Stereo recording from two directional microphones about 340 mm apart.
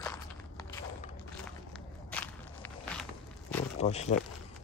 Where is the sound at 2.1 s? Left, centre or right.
Centre.